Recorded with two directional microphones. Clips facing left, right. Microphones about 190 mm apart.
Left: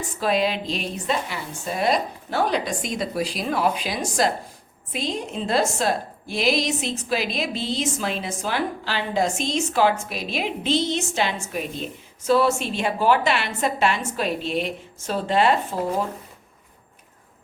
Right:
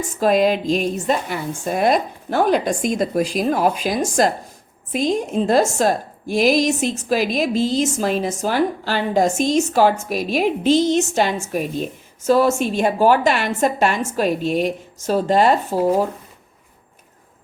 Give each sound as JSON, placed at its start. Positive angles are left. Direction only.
{"t": 0.0, "sound": "a woman's voice", "side_deg": -45}